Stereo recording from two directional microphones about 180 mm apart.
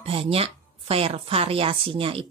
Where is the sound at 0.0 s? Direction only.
30° right (ahead or behind).